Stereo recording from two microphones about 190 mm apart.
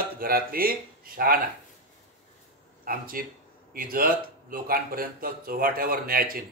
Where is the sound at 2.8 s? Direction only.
50° right (ahead or behind).